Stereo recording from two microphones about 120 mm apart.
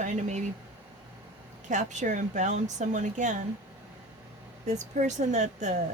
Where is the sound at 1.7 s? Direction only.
90° right.